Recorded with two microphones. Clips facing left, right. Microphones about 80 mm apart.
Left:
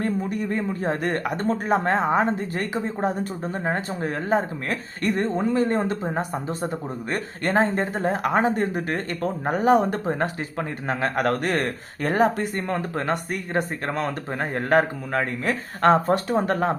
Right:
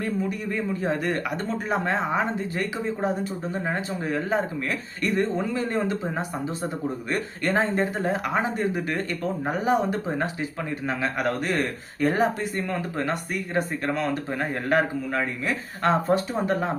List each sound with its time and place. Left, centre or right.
0.0 s a man's voice: left